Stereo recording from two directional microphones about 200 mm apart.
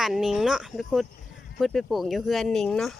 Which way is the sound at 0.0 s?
Centre (ahead or behind).